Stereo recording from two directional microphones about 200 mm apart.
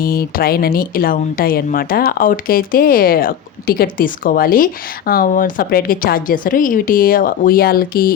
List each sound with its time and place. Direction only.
0.0 s speech: 50° left (ahead or behind)